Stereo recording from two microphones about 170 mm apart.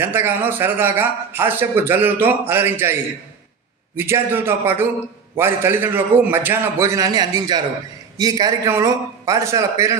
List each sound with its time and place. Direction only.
0.0 s a man's voice: 15° right (ahead or behind)
3.9 s a man's voice: 15° right (ahead or behind)